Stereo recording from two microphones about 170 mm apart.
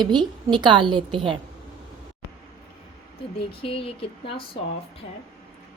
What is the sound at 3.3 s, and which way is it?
Speech, 35° left (ahead or behind).